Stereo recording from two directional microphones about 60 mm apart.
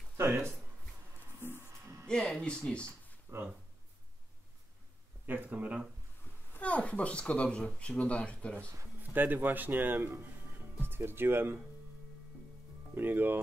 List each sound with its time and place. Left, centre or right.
0.2 s speech: right
2.4 s speech: centre
3.3 s speech: right
5.2 s speech: right
6.6 s speech: left
9.1 s speech: right
12.9 s speech: right